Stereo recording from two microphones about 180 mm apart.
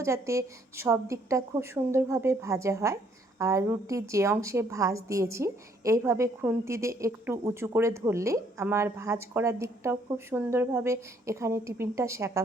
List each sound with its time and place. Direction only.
0.0 s a woman's voice: 15° right (ahead or behind)